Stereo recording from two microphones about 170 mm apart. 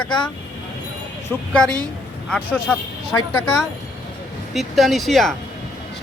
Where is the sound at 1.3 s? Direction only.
5° left (ahead or behind).